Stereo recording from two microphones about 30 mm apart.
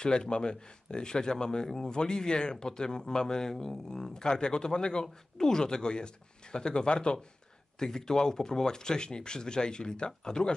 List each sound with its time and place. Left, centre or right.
0.0 s speech: left
7.8 s speech: centre